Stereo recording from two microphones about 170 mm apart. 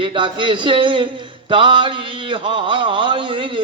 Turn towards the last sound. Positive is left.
turn(degrees=-30)  # may be behind; listen again after turning